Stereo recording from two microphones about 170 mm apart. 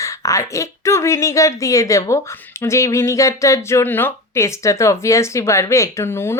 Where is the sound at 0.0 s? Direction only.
20° left (ahead or behind).